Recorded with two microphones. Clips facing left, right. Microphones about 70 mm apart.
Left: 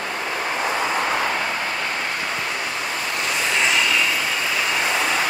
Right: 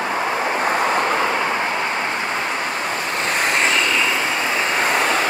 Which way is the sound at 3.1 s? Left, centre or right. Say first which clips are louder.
Right 3 dB; right.